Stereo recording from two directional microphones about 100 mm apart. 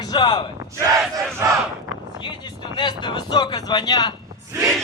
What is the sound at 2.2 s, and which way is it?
Speech, 50° left (ahead or behind).